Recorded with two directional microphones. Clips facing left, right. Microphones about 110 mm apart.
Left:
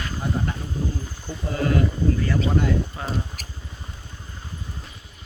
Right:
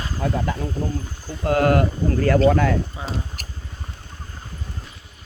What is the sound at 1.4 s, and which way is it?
Speech, 65° right (ahead or behind).